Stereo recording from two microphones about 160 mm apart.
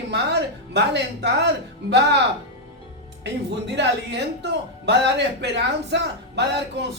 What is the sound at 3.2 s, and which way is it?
Speech, 90° right.